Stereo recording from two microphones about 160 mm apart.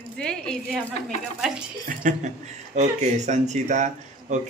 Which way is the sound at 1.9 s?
50° right (ahead or behind).